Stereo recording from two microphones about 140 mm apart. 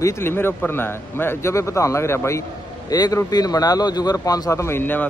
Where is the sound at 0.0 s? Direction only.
20° left (ahead or behind).